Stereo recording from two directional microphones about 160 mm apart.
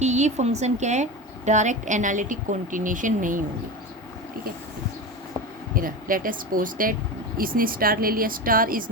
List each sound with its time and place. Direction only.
0.0 s a woman's voice: 45° right (ahead or behind)
5.7 s speech: 60° right (ahead or behind)